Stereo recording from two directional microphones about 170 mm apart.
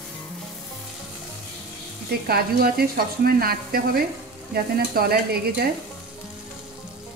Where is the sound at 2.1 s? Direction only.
65° right (ahead or behind).